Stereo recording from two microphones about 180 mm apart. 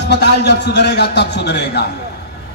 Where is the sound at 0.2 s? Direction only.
70° left (ahead or behind).